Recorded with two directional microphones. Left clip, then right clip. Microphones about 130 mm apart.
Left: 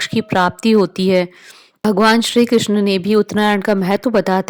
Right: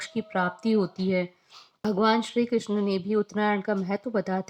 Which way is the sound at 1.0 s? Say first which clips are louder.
Left 13 dB; 75° left (ahead or behind).